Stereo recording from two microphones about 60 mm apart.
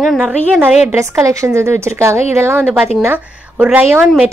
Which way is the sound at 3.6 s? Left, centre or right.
Right.